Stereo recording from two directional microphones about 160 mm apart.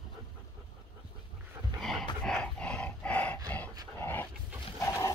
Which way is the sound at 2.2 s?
5° left (ahead or behind).